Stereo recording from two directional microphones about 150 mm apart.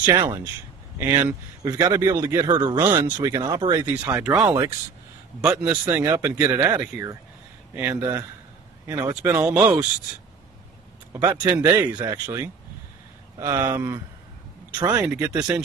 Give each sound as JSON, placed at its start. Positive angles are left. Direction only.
{"t": 0.0, "sound": "speech", "side_deg": -20}
{"t": 2.8, "sound": "speech", "side_deg": -15}
{"t": 5.7, "sound": "speech", "side_deg": -15}
{"t": 11.5, "sound": "speech", "side_deg": -15}
{"t": 11.9, "sound": "speech", "side_deg": -30}
{"t": 14.8, "sound": "speech", "side_deg": -10}